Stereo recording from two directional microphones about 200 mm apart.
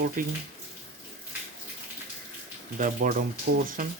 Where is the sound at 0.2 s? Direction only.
45° right (ahead or behind).